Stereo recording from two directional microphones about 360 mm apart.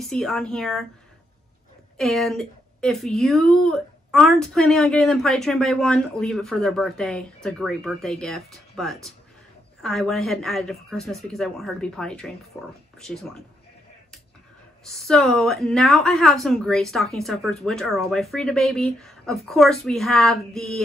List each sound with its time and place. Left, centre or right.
0.0 s speech: centre
2.0 s speech: centre
14.9 s speech: centre